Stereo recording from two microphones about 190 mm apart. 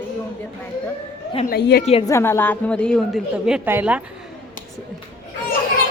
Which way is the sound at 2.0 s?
15° left (ahead or behind).